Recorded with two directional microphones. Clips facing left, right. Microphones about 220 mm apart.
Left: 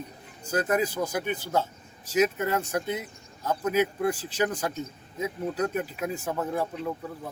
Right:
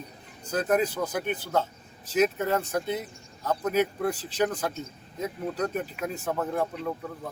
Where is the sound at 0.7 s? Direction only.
10° left (ahead or behind).